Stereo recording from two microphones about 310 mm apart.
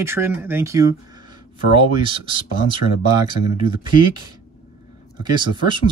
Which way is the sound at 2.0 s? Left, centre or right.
Centre.